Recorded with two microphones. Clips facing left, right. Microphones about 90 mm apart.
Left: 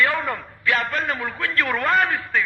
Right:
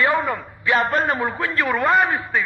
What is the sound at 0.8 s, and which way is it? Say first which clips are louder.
Speech: right 5 dB; 40° right (ahead or behind).